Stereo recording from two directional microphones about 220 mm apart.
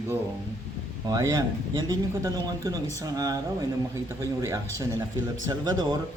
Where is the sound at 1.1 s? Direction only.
15° right (ahead or behind).